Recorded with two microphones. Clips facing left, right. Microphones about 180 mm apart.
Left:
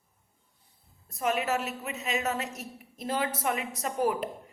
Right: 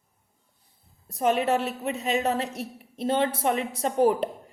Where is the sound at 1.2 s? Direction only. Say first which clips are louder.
Right 5 dB; 30° right (ahead or behind).